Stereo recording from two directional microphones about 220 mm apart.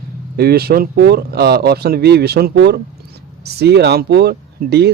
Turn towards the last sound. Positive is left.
turn(degrees=-45)  # may be behind; listen again after turning